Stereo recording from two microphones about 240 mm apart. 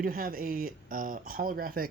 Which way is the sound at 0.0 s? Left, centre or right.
Right.